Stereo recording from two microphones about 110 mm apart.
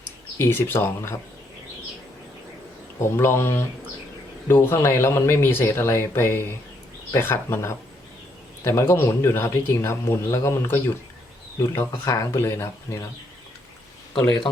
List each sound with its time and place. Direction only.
0.3 s speech: 20° left (ahead or behind)
3.0 s speech: 20° left (ahead or behind)